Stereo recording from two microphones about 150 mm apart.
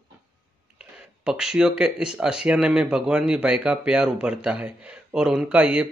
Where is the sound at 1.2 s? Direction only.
5° right (ahead or behind).